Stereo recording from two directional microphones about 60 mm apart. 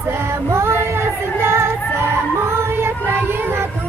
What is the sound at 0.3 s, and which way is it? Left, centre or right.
Music, right.